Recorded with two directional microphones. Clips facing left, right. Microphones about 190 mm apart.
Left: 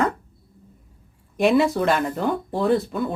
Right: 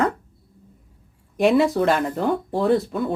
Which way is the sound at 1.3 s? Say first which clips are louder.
Right 1 dB; 35° right (ahead or behind).